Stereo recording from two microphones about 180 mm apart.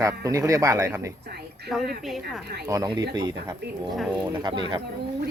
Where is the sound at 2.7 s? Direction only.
15° right (ahead or behind).